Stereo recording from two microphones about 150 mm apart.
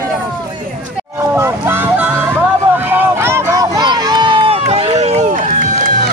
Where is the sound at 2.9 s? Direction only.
15° right (ahead or behind); by 5.5 s 55° right (ahead or behind).